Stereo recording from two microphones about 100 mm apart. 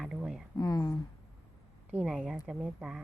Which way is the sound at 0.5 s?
40° left (ahead or behind).